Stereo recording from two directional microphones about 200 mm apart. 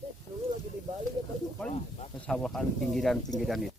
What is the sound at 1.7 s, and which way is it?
Snake, 30° left (ahead or behind).